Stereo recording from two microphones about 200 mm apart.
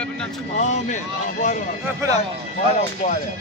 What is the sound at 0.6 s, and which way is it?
Speech, 35° left (ahead or behind).